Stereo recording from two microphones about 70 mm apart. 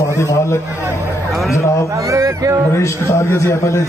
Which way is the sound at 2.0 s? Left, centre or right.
Right.